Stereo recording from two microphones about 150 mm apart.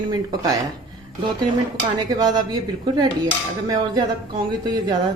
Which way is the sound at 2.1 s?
30° right (ahead or behind).